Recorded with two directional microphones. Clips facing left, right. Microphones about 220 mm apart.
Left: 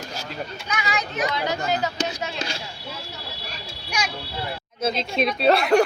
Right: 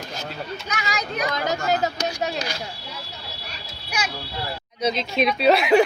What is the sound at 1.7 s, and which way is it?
Speech, 40° right (ahead or behind).